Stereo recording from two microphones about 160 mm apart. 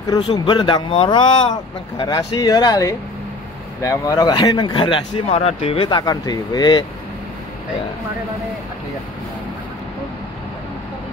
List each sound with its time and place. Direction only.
0.2 s speech: 30° left (ahead or behind)